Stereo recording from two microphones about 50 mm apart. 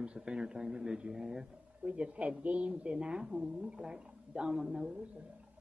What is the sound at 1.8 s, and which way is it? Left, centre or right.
A woman's voice, right.